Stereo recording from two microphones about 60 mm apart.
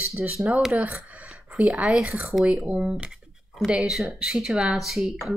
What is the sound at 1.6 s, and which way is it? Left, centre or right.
Speech, right.